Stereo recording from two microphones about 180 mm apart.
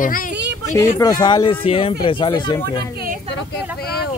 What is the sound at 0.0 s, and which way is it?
Speech, 50° left (ahead or behind).